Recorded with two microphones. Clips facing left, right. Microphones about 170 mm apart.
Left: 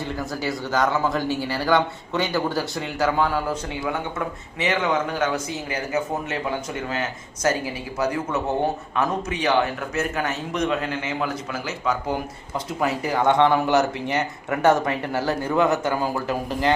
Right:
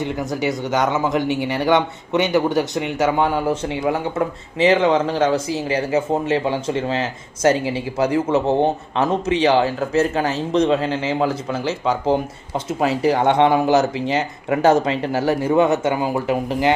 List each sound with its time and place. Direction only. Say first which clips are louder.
0.0 s speech: right 5 dB; 20° right (ahead or behind)